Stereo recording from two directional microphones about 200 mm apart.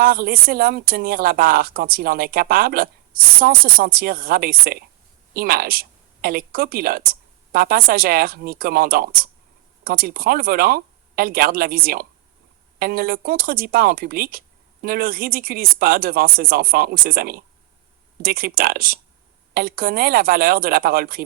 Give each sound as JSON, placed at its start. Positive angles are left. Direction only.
{"t": 0.0, "sound": "speech", "side_deg": -45}